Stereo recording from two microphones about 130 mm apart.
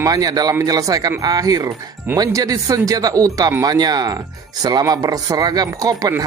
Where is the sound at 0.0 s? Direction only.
30° right (ahead or behind).